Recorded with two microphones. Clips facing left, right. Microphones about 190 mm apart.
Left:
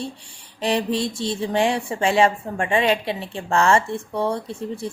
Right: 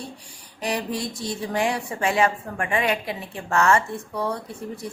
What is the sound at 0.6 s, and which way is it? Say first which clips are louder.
Speech: left 5 dB; 25° left (ahead or behind).